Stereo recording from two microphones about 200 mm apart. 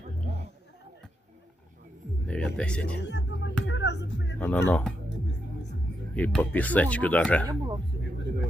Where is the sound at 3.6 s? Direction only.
60° left (ahead or behind).